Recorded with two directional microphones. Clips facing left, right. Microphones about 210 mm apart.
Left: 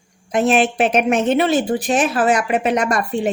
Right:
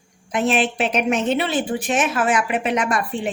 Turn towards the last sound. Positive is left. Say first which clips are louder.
# left 3 dB
turn(degrees=40)  # may be behind; listen again after turning